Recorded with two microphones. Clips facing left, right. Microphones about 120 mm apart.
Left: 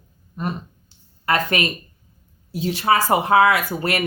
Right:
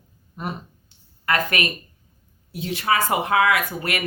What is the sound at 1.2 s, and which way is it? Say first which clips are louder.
Speech: left 2 dB; 25° left (ahead or behind).